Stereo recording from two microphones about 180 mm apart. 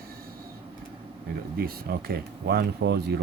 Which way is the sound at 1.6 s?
60° right (ahead or behind).